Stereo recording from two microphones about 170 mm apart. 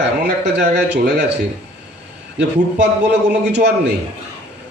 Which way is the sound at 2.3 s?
80° right.